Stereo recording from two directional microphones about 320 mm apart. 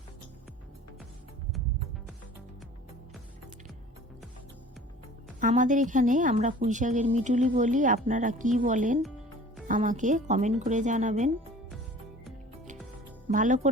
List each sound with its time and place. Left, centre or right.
5.4 s a woman's voice: right
13.2 s speech: right